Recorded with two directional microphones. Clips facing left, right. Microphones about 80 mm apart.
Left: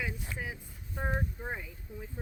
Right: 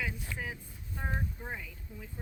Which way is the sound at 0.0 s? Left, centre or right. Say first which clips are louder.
Even; left.